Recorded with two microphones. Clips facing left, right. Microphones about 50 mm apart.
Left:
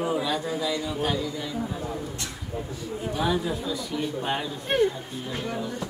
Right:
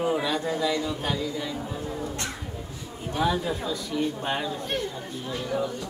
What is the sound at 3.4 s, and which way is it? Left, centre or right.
Speech, centre.